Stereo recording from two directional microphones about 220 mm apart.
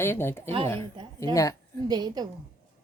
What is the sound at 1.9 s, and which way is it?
Speech, 20° right (ahead or behind).